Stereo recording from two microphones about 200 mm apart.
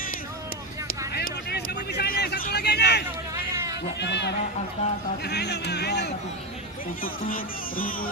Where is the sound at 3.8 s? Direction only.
60° left (ahead or behind).